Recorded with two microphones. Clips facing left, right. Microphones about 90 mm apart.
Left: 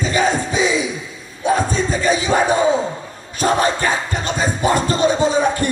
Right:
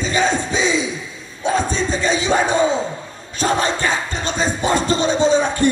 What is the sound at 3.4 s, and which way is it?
Music, 25° right (ahead or behind).